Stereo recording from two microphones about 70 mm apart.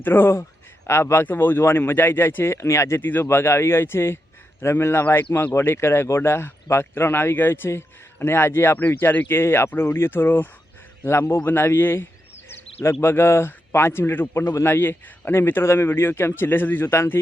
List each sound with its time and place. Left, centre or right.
0.0 s speech: left
3.0 s speech: left
3.2 s speech: left